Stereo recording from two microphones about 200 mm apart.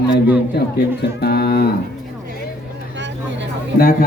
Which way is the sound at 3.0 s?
60° right (ahead or behind).